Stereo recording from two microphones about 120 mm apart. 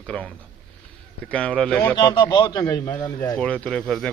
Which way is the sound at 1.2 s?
10° left (ahead or behind).